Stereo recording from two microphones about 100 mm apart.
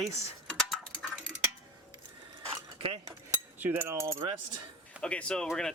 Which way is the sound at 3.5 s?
20° right (ahead or behind).